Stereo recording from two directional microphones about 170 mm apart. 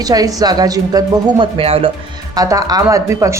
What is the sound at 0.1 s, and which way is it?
A woman's voice, 20° right (ahead or behind).